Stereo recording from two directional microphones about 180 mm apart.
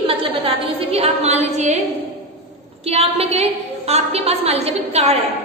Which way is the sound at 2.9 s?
35° right (ahead or behind).